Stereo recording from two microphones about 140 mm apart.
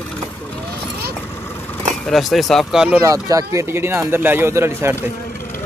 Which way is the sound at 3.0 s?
25° right (ahead or behind).